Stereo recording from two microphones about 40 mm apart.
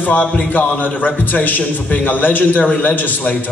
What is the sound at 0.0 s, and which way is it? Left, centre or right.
A man's voice, left.